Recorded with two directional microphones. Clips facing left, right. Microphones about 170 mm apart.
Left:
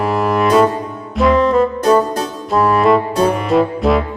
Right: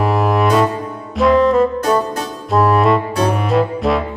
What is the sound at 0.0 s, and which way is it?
Music, centre (ahead or behind).